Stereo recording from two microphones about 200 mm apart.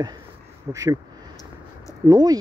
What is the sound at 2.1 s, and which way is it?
Speech, 20° right (ahead or behind).